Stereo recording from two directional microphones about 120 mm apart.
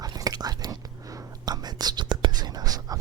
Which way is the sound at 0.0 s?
30° right (ahead or behind).